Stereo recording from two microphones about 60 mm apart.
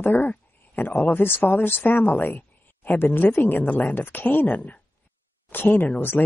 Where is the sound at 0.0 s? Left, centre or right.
Left.